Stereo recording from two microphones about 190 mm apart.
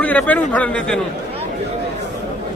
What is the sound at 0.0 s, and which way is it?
Speech, 10° left (ahead or behind).